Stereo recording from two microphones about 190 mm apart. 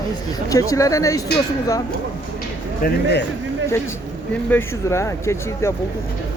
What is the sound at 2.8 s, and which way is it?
Speech, 60° left (ahead or behind).